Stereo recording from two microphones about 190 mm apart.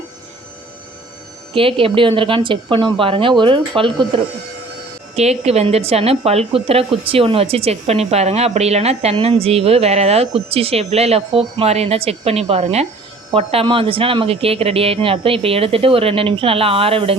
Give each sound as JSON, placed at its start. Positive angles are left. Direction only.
{"t": 1.5, "sound": "speech", "side_deg": -30}
{"t": 5.1, "sound": "a woman's voice", "side_deg": -35}